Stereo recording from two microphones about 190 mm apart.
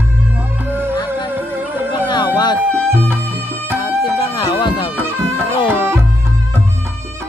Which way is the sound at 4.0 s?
25° left (ahead or behind).